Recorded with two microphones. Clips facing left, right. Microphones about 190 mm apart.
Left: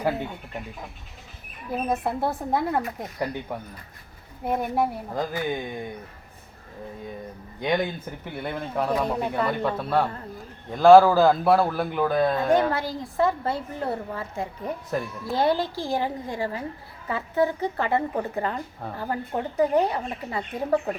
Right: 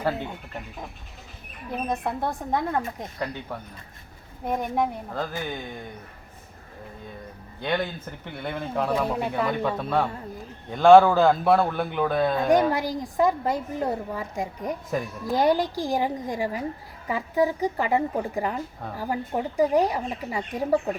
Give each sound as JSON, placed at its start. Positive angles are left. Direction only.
{"t": 1.9, "sound": "a man's voice", "side_deg": 5}
{"t": 7.6, "sound": "a man's voice", "side_deg": 15}
{"t": 12.5, "sound": "a woman's voice", "side_deg": -15}